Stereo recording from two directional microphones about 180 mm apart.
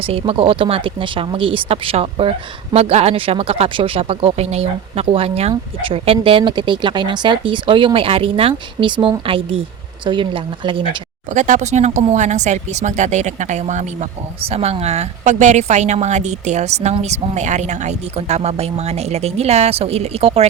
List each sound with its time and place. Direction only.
0.0 s speech: 30° right (ahead or behind)
11.3 s speech: 45° right (ahead or behind)